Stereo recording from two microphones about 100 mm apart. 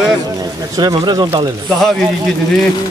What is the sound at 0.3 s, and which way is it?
Speech, 40° right (ahead or behind).